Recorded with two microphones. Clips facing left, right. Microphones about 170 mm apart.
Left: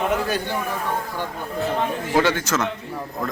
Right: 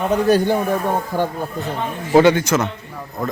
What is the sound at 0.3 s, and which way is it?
Speech, 45° right (ahead or behind).